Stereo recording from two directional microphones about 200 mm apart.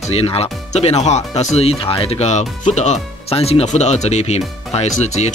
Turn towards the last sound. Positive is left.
turn(degrees=35)  # may be behind; listen again after turning